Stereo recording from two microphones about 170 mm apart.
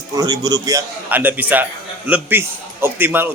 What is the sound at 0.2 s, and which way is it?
A man's voice, 25° right (ahead or behind).